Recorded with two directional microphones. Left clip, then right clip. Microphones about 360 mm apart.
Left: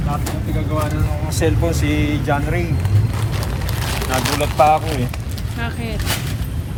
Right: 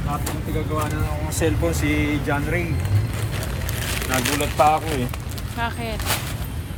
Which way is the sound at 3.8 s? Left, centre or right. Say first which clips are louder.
Left 3 dB; centre.